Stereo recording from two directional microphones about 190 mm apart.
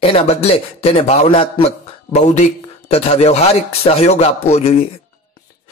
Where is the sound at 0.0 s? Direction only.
30° left (ahead or behind).